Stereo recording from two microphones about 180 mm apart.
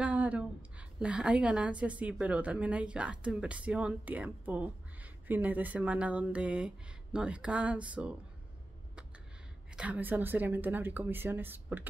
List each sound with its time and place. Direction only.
0.0 s a woman's voice: 10° right (ahead or behind)
9.8 s speech: 10° right (ahead or behind)